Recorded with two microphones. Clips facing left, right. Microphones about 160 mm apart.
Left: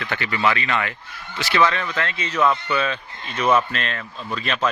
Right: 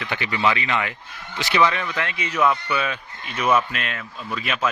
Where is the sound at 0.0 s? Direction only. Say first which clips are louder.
Even; 15° right (ahead or behind).